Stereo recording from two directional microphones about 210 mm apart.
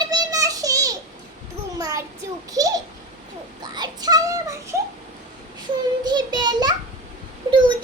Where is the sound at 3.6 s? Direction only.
20° right (ahead or behind).